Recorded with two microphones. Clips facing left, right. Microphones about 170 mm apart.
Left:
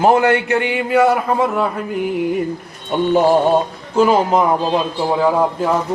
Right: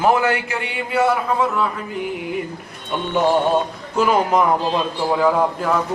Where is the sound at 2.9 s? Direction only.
40° left (ahead or behind).